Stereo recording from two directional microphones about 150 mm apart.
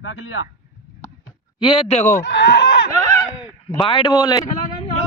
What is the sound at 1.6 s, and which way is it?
Speech, 35° left (ahead or behind).